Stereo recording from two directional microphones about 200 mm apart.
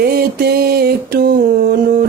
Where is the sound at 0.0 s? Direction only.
50° right (ahead or behind).